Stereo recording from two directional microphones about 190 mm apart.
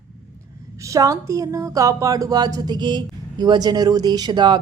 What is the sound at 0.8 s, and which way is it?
Speech, 15° right (ahead or behind).